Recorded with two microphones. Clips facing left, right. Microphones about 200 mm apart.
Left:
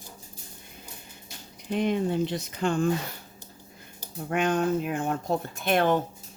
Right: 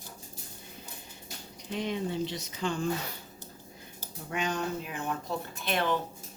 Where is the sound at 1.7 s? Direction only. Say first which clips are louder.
Left 7 dB; 55° left (ahead or behind).